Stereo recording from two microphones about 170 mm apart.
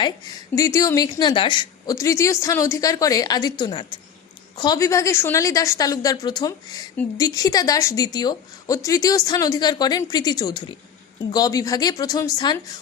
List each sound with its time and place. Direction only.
0.5 s a woman's voice: 20° left (ahead or behind)